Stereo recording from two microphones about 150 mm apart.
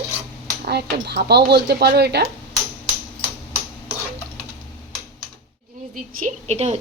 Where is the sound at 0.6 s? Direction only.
90° right.